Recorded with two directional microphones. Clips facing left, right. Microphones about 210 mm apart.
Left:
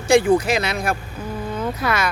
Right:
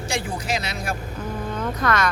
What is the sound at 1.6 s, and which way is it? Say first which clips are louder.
Speech: even; 10° left (ahead or behind).